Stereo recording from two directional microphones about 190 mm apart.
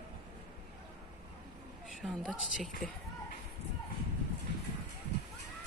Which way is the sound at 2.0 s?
Centre (ahead or behind).